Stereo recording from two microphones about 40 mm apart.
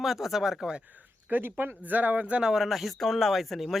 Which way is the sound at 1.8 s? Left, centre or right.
Right.